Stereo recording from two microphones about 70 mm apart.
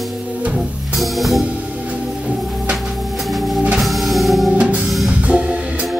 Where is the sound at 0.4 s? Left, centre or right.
Centre.